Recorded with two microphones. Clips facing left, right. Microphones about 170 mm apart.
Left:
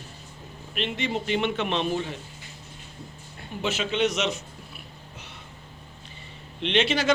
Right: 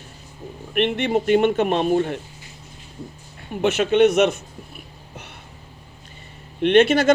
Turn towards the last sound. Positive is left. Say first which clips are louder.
# right 9 dB
turn(degrees=-50)  # may be behind; listen again after turning